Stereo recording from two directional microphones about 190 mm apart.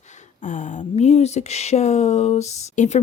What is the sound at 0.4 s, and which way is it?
Speech, 40° left (ahead or behind).